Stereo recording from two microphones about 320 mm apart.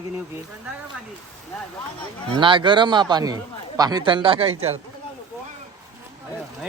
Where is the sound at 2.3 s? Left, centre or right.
Centre.